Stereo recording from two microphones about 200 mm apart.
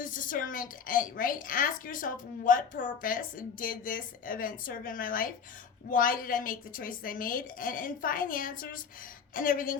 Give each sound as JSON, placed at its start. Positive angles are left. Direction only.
{"t": 0.0, "sound": "a woman's voice", "side_deg": 40}